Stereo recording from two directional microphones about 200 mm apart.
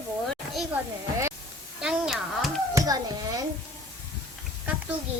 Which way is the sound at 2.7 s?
15° right (ahead or behind).